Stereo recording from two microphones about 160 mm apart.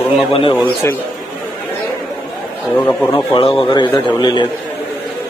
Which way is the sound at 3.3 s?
35° left (ahead or behind).